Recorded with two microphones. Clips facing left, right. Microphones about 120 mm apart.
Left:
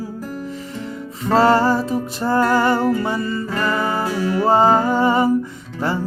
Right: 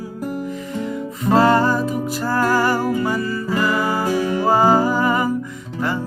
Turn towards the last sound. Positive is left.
turn(degrees=30)  # may be behind; listen again after turning